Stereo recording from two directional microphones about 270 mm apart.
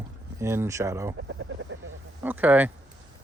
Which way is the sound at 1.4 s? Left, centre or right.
Right.